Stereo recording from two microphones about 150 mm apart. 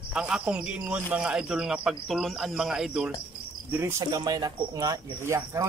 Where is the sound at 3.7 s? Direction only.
20° right (ahead or behind).